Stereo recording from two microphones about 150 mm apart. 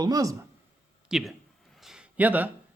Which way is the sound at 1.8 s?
5° right (ahead or behind).